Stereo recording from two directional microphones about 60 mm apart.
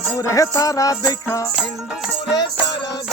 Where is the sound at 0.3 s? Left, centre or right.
Left.